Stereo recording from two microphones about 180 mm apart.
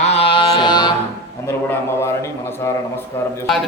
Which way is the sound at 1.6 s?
15° left (ahead or behind).